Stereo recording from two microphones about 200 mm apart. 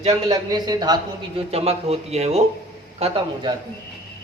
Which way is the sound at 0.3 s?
20° right (ahead or behind).